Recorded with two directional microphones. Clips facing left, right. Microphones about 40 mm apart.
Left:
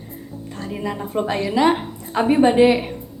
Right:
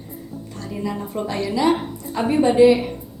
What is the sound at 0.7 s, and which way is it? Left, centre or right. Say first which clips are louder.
A woman's voice: even; left.